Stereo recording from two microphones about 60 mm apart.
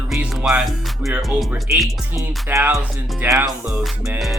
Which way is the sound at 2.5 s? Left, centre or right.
Right.